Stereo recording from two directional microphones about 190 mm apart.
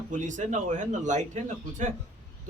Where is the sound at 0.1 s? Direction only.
40° right (ahead or behind).